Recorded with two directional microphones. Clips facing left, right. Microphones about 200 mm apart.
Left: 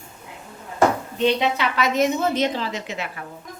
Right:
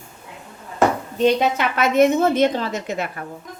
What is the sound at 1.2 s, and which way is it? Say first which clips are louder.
A woman's voice: right 3 dB; 45° right (ahead or behind).